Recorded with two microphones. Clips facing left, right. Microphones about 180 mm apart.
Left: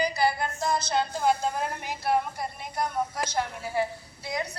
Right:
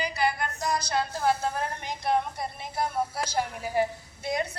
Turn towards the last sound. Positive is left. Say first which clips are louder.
# right 3 dB
turn(degrees=-25)  # may be behind; listen again after turning